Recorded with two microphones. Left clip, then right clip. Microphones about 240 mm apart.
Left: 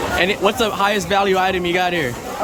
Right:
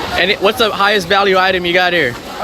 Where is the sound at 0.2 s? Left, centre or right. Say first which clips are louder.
Right 6 dB; centre.